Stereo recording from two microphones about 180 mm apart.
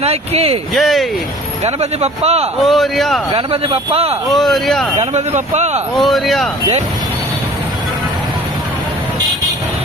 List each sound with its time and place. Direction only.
0.0 s speech: 35° right (ahead or behind)
0.7 s a man's voice: centre (ahead or behind)
1.6 s speech: 35° right (ahead or behind)
2.6 s a man's voice: centre (ahead or behind)
3.3 s speech: 30° right (ahead or behind)
4.3 s a man's voice: centre (ahead or behind)
4.9 s speech: 40° right (ahead or behind)
5.9 s a man's voice: centre (ahead or behind)